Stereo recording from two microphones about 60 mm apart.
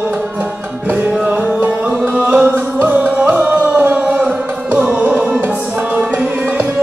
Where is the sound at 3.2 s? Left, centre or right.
Centre.